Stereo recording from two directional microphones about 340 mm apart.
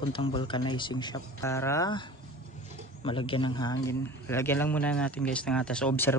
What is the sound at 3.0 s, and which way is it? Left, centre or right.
Speech, centre.